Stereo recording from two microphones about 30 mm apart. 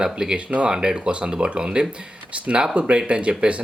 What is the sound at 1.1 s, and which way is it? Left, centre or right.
Speech, right.